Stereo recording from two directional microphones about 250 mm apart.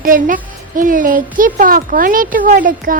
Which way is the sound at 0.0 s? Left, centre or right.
Right.